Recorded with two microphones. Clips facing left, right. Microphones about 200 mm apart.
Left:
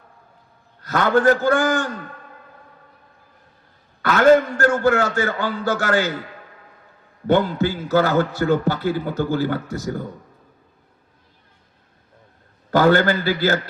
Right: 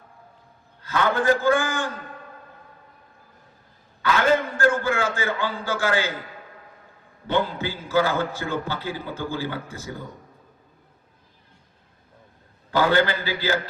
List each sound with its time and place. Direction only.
0.8 s a man's voice: 40° left (ahead or behind)
4.0 s a man's voice: 45° left (ahead or behind)
7.3 s a man's voice: 45° left (ahead or behind)
12.7 s a man's voice: 45° left (ahead or behind)